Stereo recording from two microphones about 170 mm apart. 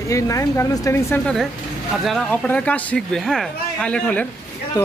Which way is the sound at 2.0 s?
5° left (ahead or behind).